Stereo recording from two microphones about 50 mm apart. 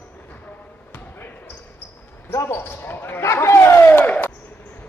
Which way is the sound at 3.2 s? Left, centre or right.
Left.